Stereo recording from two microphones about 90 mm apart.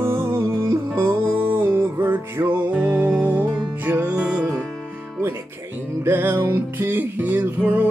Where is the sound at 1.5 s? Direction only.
25° right (ahead or behind).